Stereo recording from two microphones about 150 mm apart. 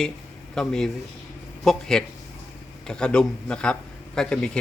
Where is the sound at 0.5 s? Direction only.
5° left (ahead or behind).